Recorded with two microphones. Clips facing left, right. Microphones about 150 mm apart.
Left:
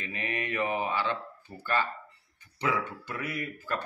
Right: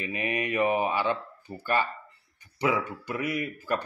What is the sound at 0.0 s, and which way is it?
Speech, 15° right (ahead or behind).